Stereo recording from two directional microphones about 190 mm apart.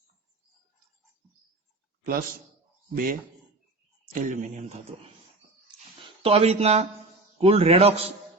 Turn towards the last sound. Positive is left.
turn(degrees=-35)  # may be behind; listen again after turning